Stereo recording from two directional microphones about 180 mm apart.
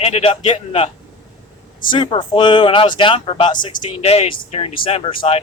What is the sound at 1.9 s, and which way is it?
A man's voice, 25° left (ahead or behind).